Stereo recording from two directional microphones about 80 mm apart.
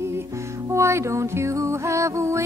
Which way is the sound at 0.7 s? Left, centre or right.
Right.